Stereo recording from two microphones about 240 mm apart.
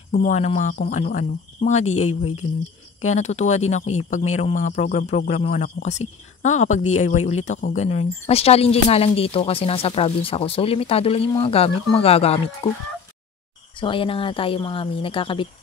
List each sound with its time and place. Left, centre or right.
0.1 s speech: left